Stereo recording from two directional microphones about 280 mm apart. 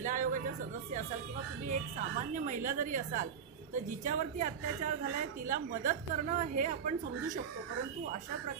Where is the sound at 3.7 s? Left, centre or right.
Right.